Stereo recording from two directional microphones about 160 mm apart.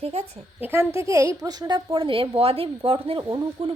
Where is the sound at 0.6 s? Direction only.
15° right (ahead or behind); by 3.0 s 35° right (ahead or behind).